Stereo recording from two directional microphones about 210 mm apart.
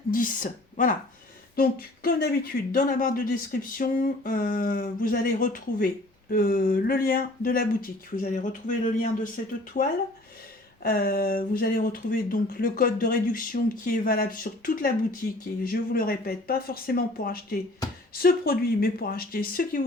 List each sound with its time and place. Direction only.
0.1 s speech: 40° left (ahead or behind)